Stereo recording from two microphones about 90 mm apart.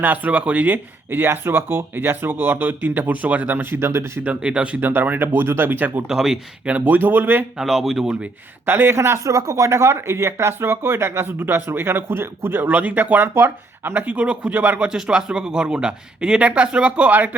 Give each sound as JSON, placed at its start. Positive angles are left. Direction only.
{"t": 0.0, "sound": "speech", "side_deg": -20}
{"t": 4.3, "sound": "speech", "side_deg": -10}
{"t": 6.1, "sound": "speech", "side_deg": -5}
{"t": 7.6, "sound": "speech", "side_deg": 0}
{"t": 8.6, "sound": "speech", "side_deg": -25}